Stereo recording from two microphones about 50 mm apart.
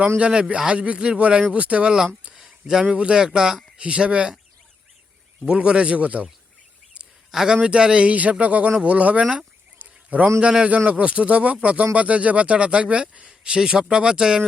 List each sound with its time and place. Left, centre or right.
0.3 s speech: right
2.3 s a sound: centre
2.8 s speech: right
3.2 s speech: centre
5.5 s speech: right
7.3 s speech: centre
7.5 s speech: right
9.7 s a sound: right
10.7 s speech: right; by 14.4 s centre